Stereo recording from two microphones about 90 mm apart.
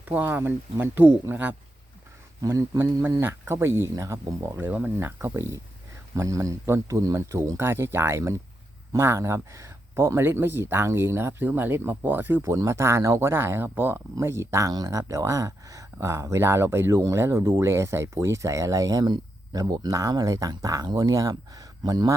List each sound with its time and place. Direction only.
0.0 s speech: 20° right (ahead or behind)
2.4 s speech: 35° right (ahead or behind)
2.7 s speech: 25° right (ahead or behind)
14.7 s speech: 40° right (ahead or behind)